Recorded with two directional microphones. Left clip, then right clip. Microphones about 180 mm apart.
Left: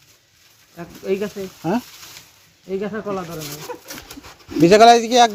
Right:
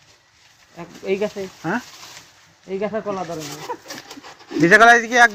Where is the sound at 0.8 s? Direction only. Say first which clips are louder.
Right 1 dB; 40° left (ahead or behind).